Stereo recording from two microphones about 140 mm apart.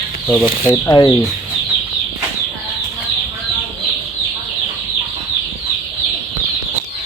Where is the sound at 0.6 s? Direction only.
15° left (ahead or behind).